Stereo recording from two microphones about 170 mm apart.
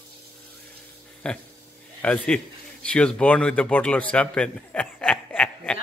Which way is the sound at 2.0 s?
10° left (ahead or behind).